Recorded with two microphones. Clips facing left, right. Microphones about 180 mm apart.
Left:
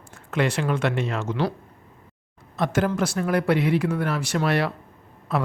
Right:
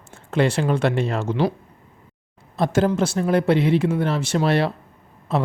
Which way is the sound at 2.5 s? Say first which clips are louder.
Right 4 dB; 30° right (ahead or behind).